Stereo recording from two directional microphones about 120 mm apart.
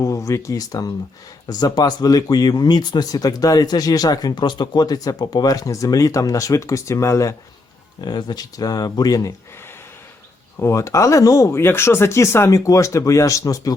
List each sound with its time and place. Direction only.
0.0 s speech: 25° left (ahead or behind)
8.0 s speech: 35° left (ahead or behind)
10.6 s speech: 25° left (ahead or behind)